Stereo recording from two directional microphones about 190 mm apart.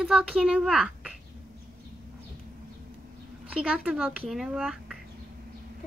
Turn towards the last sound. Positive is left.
turn(degrees=-5)  # may be behind; listen again after turning